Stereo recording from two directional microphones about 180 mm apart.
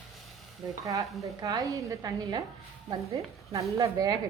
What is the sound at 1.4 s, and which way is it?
Speech, 20° right (ahead or behind).